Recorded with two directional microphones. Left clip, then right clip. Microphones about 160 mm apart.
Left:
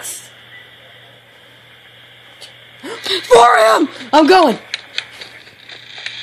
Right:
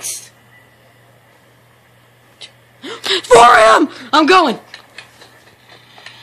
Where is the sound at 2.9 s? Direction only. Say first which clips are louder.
Right 2 dB; 5° right (ahead or behind).